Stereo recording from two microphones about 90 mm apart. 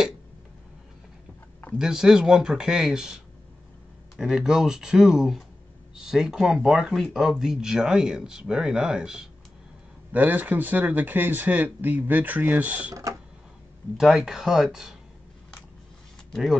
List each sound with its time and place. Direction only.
1.8 s speech: 5° right (ahead or behind)
4.2 s speech: 5° right (ahead or behind)
10.1 s speech: 20° right (ahead or behind)
13.9 s speech: 5° right (ahead or behind)
16.3 s a sound: 5° left (ahead or behind)